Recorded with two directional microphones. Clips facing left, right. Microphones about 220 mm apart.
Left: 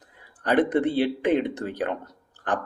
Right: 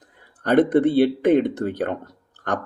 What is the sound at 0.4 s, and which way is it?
Speech, 50° right (ahead or behind).